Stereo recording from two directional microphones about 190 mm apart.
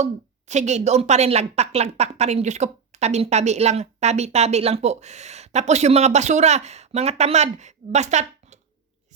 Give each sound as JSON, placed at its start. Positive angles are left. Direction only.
{"t": 0.0, "sound": "a woman's voice", "side_deg": -35}